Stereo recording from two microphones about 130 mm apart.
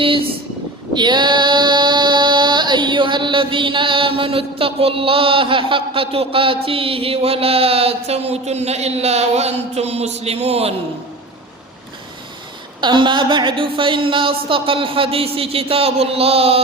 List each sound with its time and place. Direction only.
0.0 s speech: 45° right (ahead or behind)
0.9 s female singing: 35° right (ahead or behind)
12.8 s female singing: 40° right (ahead or behind)